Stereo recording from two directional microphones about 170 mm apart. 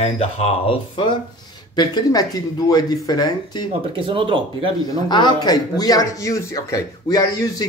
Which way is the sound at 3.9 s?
30° right (ahead or behind).